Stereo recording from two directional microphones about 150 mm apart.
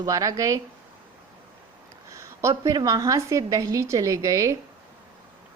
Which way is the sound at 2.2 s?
20° right (ahead or behind).